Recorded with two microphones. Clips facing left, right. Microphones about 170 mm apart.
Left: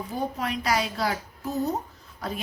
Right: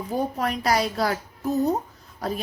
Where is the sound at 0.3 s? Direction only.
45° right (ahead or behind).